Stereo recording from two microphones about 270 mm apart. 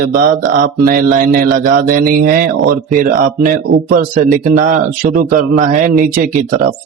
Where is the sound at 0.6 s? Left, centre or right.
Right.